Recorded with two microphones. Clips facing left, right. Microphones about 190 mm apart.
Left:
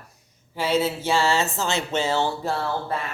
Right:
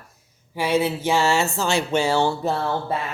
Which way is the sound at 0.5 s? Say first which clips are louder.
Right 2 dB; 15° right (ahead or behind).